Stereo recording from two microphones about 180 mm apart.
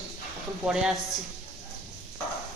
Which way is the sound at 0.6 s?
5° right (ahead or behind).